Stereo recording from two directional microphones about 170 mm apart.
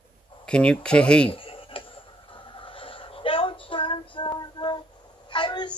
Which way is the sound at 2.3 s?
30° left (ahead or behind).